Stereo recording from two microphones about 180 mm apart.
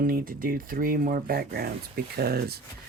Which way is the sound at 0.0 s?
50° right (ahead or behind).